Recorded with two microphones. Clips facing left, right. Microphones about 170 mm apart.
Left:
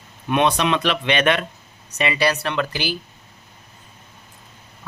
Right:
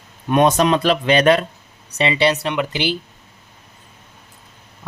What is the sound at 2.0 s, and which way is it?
Speech, 25° right (ahead or behind).